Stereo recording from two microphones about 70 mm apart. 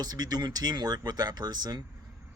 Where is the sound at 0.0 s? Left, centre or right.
Right.